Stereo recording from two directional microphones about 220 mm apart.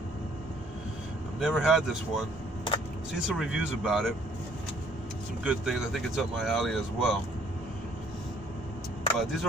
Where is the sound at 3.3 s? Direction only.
5° right (ahead or behind).